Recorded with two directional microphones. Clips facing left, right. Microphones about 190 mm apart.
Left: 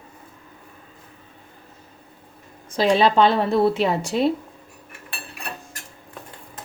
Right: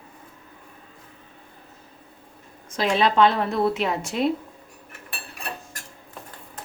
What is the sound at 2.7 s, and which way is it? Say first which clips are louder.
A woman's voice: left 4 dB; 30° left (ahead or behind).